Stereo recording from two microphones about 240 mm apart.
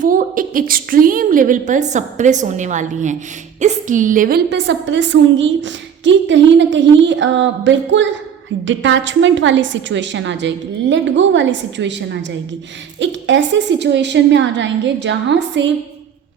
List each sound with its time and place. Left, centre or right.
0.0 s a woman's voice: right